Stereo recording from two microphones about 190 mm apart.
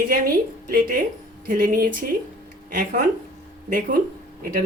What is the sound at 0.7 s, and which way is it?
Speech, 50° right (ahead or behind).